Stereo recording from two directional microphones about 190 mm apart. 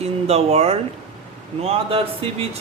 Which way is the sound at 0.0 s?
35° right (ahead or behind).